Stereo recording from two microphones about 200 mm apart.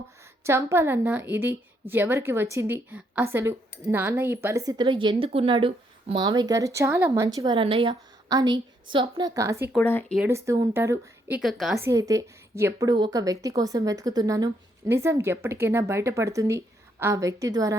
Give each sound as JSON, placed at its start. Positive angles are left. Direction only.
{"t": 0.4, "sound": "a woman's voice", "side_deg": -10}
{"t": 9.7, "sound": "speech", "side_deg": 10}
{"t": 10.2, "sound": "a woman's voice", "side_deg": -10}
{"t": 11.3, "sound": "a woman's voice", "side_deg": 0}
{"t": 11.8, "sound": "a woman's voice", "side_deg": -15}